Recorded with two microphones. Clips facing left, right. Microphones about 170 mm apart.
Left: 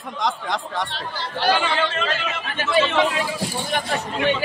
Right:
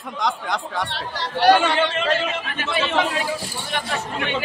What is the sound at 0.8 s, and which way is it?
Speech, 70° right (ahead or behind).